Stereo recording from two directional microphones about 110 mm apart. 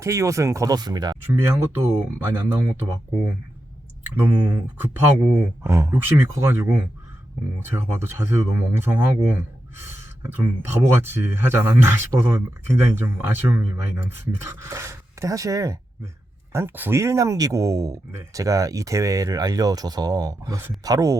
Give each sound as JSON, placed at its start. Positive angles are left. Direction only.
{"t": 0.0, "sound": "speech", "side_deg": -30}
{"t": 1.3, "sound": "speech", "side_deg": -20}
{"t": 4.2, "sound": "speech", "side_deg": -15}